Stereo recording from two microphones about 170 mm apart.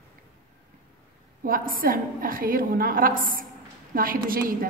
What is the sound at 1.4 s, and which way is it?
A woman's voice, 55° right (ahead or behind).